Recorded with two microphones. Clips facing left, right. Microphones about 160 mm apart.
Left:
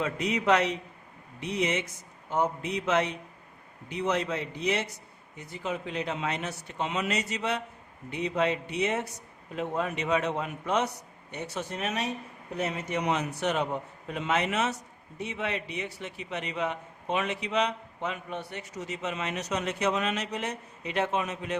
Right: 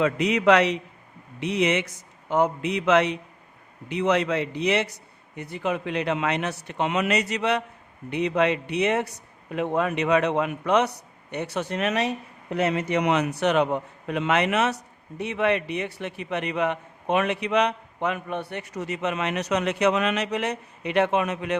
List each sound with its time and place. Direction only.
0.0 s a man's voice: 80° right
5.4 s a man's voice: 65° right (ahead or behind)